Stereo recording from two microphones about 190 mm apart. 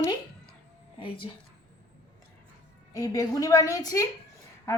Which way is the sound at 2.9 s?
20° left (ahead or behind).